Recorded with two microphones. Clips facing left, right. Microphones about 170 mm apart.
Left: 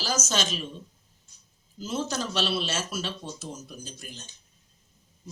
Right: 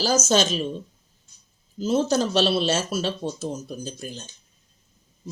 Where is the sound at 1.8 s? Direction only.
30° right (ahead or behind).